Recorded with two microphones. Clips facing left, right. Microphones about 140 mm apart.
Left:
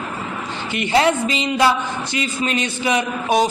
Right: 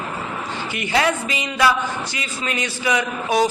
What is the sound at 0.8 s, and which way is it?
Speech, 25° left (ahead or behind).